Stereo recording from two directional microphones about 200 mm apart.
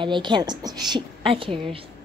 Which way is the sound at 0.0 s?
25° right (ahead or behind).